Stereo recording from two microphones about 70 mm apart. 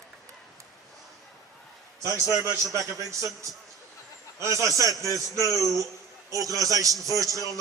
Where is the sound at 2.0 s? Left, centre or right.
Right.